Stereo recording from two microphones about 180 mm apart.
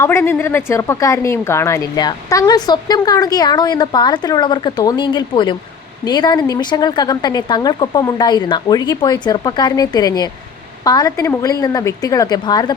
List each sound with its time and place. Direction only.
0.0 s a woman's voice: 15° left (ahead or behind)